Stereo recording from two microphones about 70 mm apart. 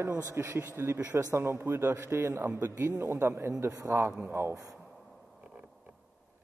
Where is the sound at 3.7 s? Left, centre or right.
Right.